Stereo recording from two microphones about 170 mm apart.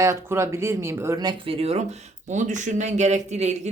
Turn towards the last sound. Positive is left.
turn(degrees=-40)  # may be behind; listen again after turning